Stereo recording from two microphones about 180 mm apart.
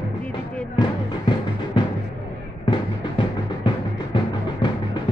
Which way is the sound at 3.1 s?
25° left (ahead or behind).